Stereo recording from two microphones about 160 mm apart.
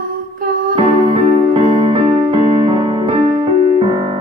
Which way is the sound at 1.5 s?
35° right (ahead or behind).